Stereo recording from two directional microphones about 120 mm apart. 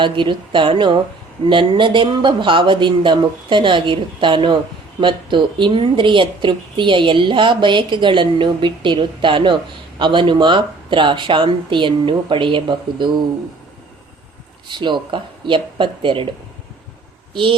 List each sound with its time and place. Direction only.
0.0 s speech: 40° right (ahead or behind)
14.7 s speech: 40° right (ahead or behind)